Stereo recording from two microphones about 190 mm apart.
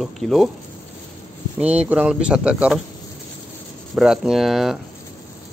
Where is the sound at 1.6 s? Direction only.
5° right (ahead or behind).